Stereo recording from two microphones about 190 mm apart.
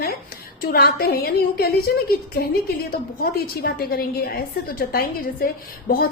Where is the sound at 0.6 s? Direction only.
55° left (ahead or behind).